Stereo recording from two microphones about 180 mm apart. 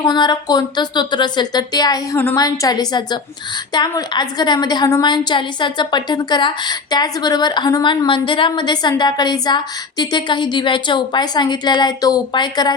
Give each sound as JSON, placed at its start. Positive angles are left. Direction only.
{"t": 0.0, "sound": "a woman's voice", "side_deg": 25}